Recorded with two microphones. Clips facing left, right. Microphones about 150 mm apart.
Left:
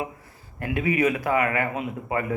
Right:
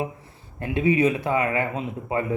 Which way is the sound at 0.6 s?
25° right (ahead or behind).